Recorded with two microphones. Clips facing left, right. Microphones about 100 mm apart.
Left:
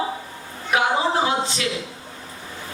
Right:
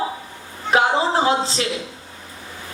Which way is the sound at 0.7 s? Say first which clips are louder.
Right 3 dB; 30° right (ahead or behind).